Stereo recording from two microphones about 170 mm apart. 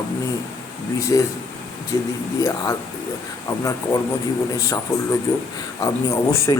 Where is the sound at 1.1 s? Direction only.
20° left (ahead or behind).